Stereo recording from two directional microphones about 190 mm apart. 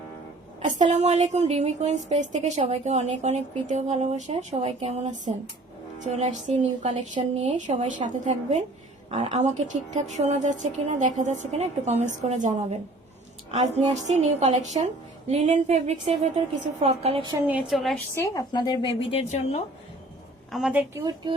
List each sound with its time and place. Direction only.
0.6 s a woman's voice: 40° right (ahead or behind)
17.4 s a woman's voice: 5° right (ahead or behind)
18.1 s a woman's voice: 15° left (ahead or behind); by 19.6 s 35° left (ahead or behind)
20.5 s a woman's voice: 5° right (ahead or behind)
20.9 s speech: 20° right (ahead or behind)